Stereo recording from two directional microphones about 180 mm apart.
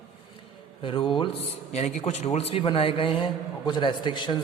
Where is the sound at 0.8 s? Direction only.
25° left (ahead or behind).